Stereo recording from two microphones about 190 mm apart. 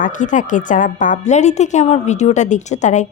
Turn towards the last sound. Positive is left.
turn(degrees=40)  # may be behind; listen again after turning